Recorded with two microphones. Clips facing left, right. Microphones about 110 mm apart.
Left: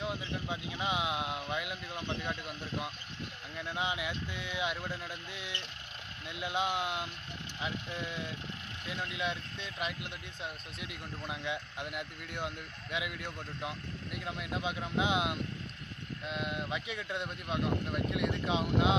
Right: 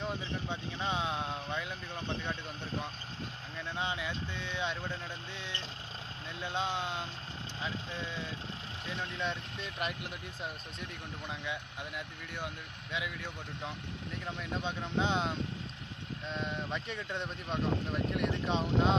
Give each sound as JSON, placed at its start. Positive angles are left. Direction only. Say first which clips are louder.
{"t": 0.0, "sound": "speech", "louder": "even", "side_deg": 5}
{"t": 6.4, "sound": "speech", "louder": "left 2 dB", "side_deg": 15}
{"t": 8.8, "sound": "speech", "louder": "even", "side_deg": -25}
{"t": 9.2, "sound": "speech", "louder": "even", "side_deg": 0}
{"t": 11.2, "sound": "speech", "louder": "left 2 dB", "side_deg": 20}
{"t": 14.2, "sound": "speech", "louder": "left 1 dB", "side_deg": 10}